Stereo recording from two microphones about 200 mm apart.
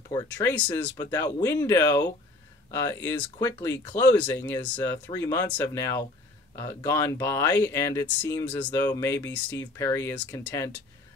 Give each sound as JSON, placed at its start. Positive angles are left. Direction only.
{"t": 0.1, "sound": "speech", "side_deg": 15}